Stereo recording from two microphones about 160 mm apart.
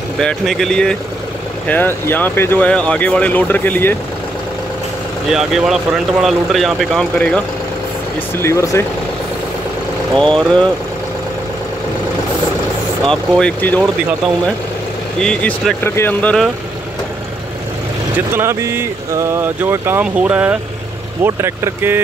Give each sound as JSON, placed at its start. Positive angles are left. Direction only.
{"t": 0.2, "sound": "speech", "side_deg": 5}
{"t": 5.3, "sound": "speech", "side_deg": 0}
{"t": 8.4, "sound": "speech", "side_deg": 15}
{"t": 10.1, "sound": "speech", "side_deg": 5}
{"t": 13.1, "sound": "speech", "side_deg": 5}
{"t": 15.1, "sound": "speech", "side_deg": 5}
{"t": 18.3, "sound": "speech", "side_deg": -15}